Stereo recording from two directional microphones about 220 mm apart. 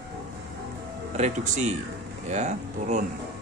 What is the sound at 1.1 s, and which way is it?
Speech, 30° right (ahead or behind).